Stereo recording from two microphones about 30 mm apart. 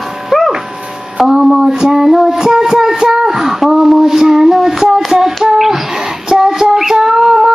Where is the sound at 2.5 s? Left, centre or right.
Centre.